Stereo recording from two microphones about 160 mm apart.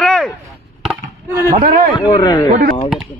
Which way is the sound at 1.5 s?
60° right (ahead or behind).